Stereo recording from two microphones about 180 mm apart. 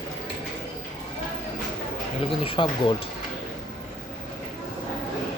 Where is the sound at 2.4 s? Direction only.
30° left (ahead or behind).